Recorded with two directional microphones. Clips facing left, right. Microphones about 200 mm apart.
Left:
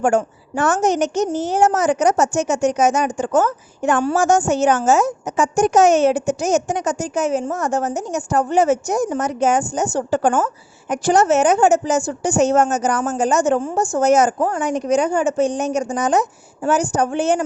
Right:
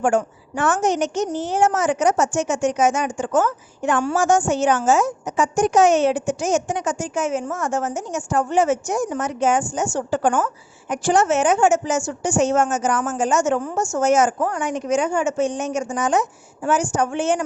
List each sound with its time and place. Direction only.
0.0 s a woman's voice: 40° left (ahead or behind)